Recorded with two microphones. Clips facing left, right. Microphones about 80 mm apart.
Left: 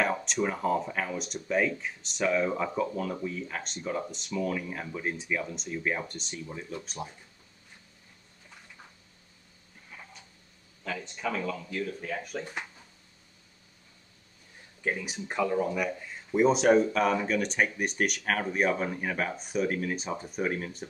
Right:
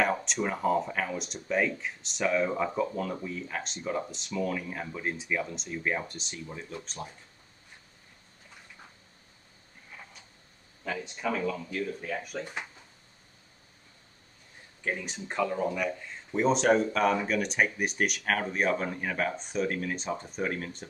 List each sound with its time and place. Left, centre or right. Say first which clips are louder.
0.0 s speech: even; centre
10.8 s speech: right 1 dB; centre
14.9 s speech: left 1 dB; centre